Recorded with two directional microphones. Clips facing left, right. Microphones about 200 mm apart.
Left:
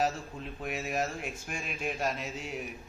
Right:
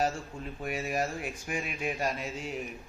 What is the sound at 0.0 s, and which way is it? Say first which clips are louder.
A man's voice: even; centre (ahead or behind).